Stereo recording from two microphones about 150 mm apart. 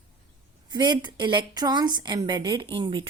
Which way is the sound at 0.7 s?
30° right (ahead or behind).